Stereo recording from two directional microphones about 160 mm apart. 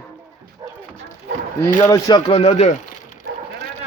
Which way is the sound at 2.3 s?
40° left (ahead or behind).